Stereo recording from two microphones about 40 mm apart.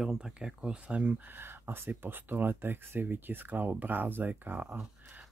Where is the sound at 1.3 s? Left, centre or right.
Right.